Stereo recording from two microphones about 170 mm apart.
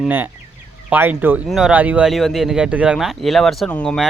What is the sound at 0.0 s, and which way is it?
Speech, 10° right (ahead or behind).